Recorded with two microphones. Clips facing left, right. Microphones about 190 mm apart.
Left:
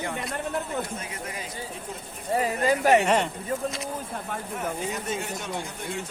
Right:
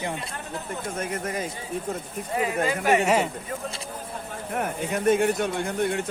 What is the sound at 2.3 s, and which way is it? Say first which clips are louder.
Speech: left 2 dB; 40° left (ahead or behind).